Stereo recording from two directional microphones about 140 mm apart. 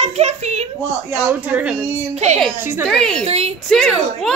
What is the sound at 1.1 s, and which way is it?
Speech, 10° right (ahead or behind).